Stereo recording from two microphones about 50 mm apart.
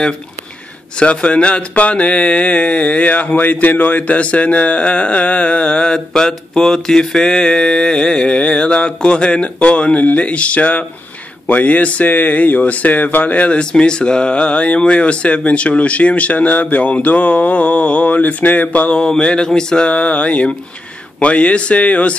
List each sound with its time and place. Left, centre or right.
0.9 s speech: centre
19.0 s a sound: centre
21.2 s speech: left